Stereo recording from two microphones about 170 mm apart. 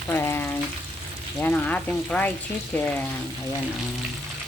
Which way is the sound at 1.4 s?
10° left (ahead or behind).